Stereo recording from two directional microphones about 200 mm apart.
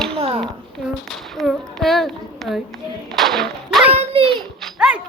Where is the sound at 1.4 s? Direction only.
Centre (ahead or behind).